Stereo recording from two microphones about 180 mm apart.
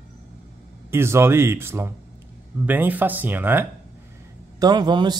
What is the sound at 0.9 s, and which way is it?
Speech, 15° right (ahead or behind).